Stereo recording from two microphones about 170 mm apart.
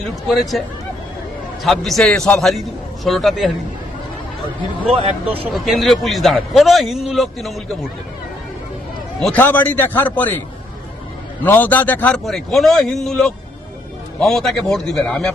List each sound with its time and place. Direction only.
0.0 s a man's voice: centre (ahead or behind)
1.6 s a man's voice: centre (ahead or behind)
4.9 s speech: 35° right (ahead or behind)
5.4 s a man's voice: centre (ahead or behind)
9.2 s a man's voice: 10° left (ahead or behind)
11.4 s a man's voice: 10° left (ahead or behind)